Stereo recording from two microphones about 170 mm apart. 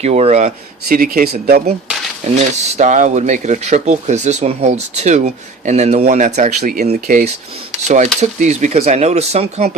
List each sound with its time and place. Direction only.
0.0 s speech: 40° right (ahead or behind)
0.9 s speech: 55° right (ahead or behind)
2.2 s speech: 45° right (ahead or behind)